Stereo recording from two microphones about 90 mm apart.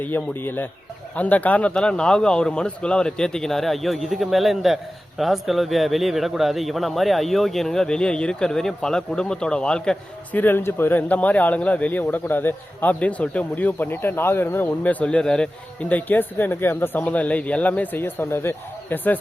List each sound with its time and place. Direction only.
0.0 s a man's voice: 20° left (ahead or behind)
10.3 s speech: 25° left (ahead or behind)